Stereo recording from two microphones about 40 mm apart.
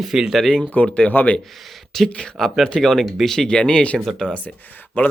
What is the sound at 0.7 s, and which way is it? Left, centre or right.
Speech, left.